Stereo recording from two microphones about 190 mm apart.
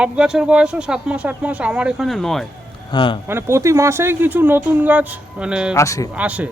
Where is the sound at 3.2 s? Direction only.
15° right (ahead or behind).